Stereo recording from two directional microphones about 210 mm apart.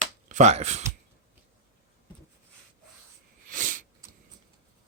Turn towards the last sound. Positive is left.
turn(degrees=-40)  # may be behind; listen again after turning